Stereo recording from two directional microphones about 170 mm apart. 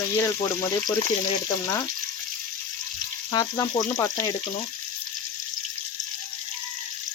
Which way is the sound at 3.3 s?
20° left (ahead or behind).